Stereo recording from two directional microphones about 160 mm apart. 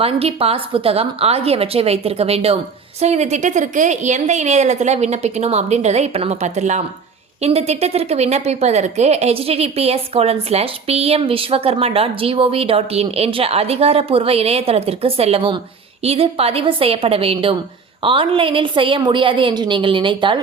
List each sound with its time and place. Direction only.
0.0 s a woman's voice: 35° right (ahead or behind)